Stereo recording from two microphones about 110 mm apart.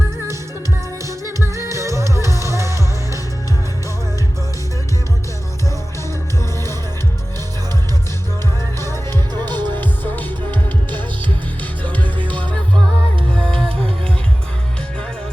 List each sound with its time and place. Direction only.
1.5 s music: 25° right (ahead or behind)
8.9 s music: 40° right (ahead or behind)
9.8 s music: 15° left (ahead or behind)
13.3 s music: 5° left (ahead or behind)